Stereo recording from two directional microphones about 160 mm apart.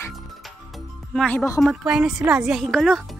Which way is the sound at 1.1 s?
5° left (ahead or behind).